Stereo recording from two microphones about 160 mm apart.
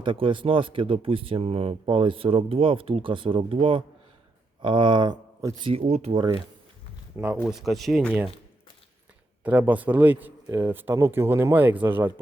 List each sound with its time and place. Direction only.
0.0 s speech: 30° right (ahead or behind)
5.6 s speech: 40° right (ahead or behind)
7.4 s speech: centre (ahead or behind)
9.4 s a man's voice: 10° right (ahead or behind)